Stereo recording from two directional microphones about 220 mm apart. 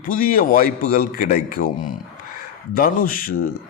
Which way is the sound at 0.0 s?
40° left (ahead or behind).